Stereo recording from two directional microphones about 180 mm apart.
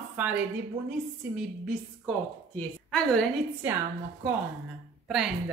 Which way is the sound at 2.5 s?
5° left (ahead or behind).